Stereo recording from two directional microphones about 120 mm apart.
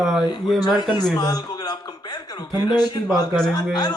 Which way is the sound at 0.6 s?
35° left (ahead or behind).